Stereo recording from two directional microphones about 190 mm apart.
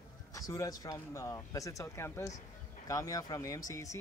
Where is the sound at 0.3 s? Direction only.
15° left (ahead or behind).